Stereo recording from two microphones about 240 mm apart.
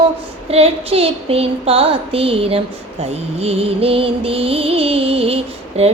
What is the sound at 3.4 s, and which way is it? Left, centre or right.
Music, right.